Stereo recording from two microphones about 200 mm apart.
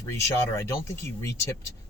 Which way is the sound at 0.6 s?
15° left (ahead or behind).